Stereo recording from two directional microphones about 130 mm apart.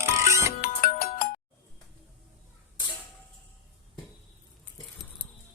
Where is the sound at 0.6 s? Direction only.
90° left.